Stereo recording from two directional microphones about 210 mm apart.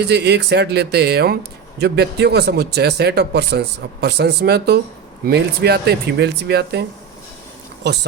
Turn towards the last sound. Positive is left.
turn(degrees=-55)  # may be behind; listen again after turning